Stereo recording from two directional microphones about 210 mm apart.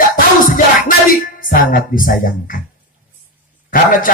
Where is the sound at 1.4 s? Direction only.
40° left (ahead or behind).